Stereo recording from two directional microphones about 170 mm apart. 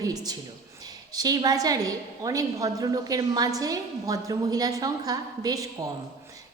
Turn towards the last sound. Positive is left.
turn(degrees=-20)  # may be behind; listen again after turning